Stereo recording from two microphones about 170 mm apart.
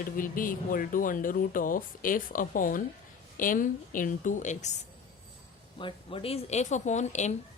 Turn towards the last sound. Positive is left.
turn(degrees=45)  # may be behind; listen again after turning